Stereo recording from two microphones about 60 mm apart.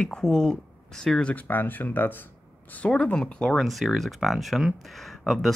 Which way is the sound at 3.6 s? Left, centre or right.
Centre.